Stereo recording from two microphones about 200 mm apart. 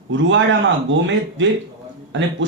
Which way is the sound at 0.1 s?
70° right (ahead or behind).